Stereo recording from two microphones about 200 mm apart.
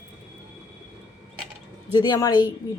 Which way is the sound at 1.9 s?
20° left (ahead or behind).